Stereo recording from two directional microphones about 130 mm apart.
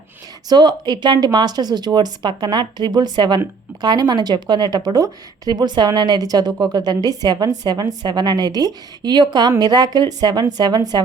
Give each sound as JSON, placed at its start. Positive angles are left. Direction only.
{"t": 0.4, "sound": "speech", "side_deg": -35}